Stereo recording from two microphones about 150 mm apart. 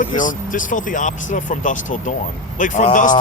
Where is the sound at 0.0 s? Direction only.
60° left (ahead or behind).